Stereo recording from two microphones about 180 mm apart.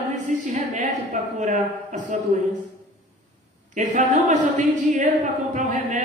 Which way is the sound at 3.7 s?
45° right (ahead or behind).